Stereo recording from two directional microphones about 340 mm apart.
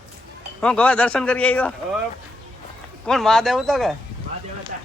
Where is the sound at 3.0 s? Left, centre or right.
Centre.